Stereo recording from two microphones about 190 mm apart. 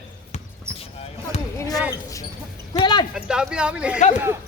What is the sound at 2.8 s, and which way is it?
Speech, 20° left (ahead or behind).